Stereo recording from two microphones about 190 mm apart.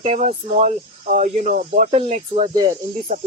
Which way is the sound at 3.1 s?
40° right (ahead or behind).